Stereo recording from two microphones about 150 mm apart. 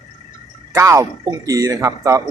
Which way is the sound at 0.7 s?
20° right (ahead or behind).